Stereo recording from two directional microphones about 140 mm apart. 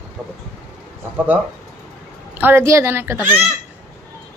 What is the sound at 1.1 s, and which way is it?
Speech, 15° right (ahead or behind).